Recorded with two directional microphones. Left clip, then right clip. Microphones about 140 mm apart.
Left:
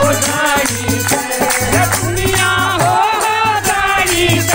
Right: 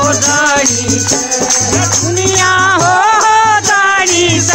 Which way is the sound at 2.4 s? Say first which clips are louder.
Right 5 dB; 50° right (ahead or behind).